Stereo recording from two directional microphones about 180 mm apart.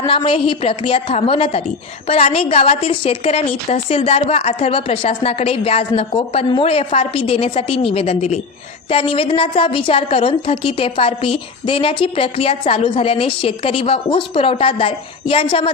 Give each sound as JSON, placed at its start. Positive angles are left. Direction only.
{"t": 0.0, "sound": "a woman's voice", "side_deg": 30}